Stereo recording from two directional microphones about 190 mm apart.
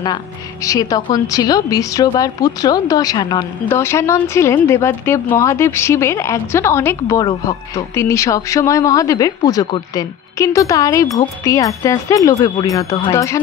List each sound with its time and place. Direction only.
0.7 s a woman's voice: 20° left (ahead or behind)